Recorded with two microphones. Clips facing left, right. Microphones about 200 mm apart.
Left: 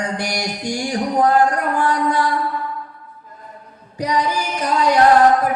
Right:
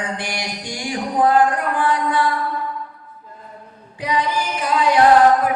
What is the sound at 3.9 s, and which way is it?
Music, 40° left (ahead or behind).